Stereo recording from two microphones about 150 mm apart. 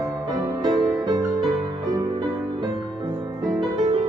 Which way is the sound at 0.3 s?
25° right (ahead or behind).